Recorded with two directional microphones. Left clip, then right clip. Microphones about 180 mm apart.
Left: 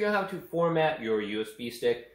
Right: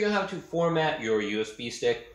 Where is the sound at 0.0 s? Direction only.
20° right (ahead or behind).